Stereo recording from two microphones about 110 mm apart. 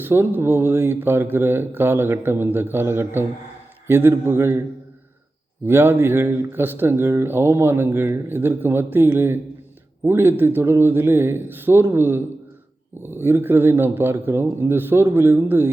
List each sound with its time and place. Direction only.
0.0 s speech: 20° right (ahead or behind)
5.6 s speech: 20° right (ahead or behind)